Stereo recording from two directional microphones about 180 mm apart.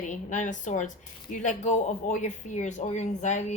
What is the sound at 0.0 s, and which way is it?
A woman's voice, 45° left (ahead or behind).